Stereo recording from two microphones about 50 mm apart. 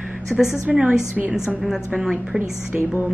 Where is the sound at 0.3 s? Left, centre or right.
Right.